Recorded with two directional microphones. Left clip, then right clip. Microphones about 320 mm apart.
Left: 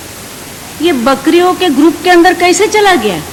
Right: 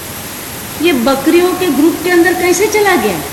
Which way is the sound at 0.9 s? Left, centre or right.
Left.